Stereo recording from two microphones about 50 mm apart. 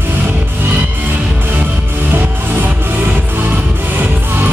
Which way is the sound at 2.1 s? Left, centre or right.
Right.